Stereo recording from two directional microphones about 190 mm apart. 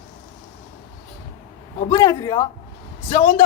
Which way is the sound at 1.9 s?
20° left (ahead or behind).